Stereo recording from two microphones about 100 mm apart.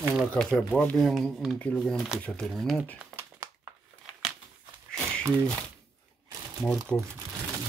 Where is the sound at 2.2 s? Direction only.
10° left (ahead or behind).